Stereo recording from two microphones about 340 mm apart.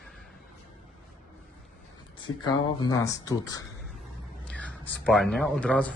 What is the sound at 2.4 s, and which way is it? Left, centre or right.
Speech, centre.